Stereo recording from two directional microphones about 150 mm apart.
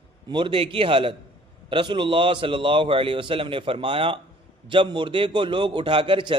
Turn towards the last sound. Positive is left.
turn(degrees=-35)  # may be behind; listen again after turning